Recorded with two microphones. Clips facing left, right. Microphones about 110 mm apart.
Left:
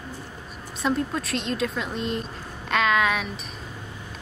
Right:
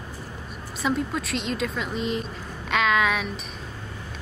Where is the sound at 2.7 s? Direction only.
Centre (ahead or behind).